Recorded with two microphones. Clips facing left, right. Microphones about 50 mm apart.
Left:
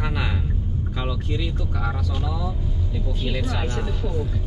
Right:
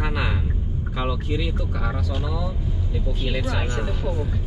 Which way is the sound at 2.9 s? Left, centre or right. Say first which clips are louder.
Right 1 dB; centre.